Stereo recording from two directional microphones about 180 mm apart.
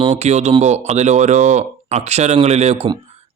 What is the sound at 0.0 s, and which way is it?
A man's voice, 35° right (ahead or behind).